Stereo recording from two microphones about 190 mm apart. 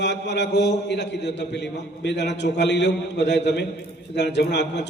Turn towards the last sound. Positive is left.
turn(degrees=65)  # may be behind; listen again after turning